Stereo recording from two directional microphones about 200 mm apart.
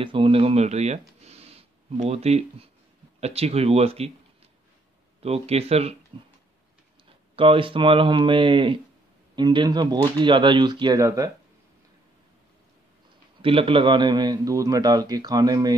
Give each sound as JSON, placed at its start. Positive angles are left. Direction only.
{"t": 0.0, "sound": "speech", "side_deg": -25}
{"t": 5.2, "sound": "speech", "side_deg": -30}
{"t": 7.3, "sound": "a man's voice", "side_deg": -25}
{"t": 13.4, "sound": "a man's voice", "side_deg": -25}